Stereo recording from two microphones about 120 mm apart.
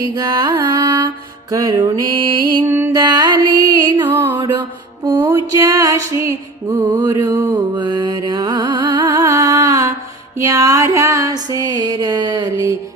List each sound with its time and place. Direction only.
0.0 s music: 35° right (ahead or behind)
2.6 s music: 20° right (ahead or behind)
2.9 s music: 35° right (ahead or behind)
4.1 s music: 25° right (ahead or behind)